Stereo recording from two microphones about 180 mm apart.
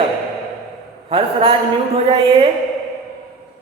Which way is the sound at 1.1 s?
30° right (ahead or behind).